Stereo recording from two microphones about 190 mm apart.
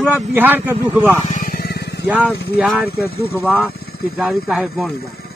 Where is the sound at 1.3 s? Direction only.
45° left (ahead or behind).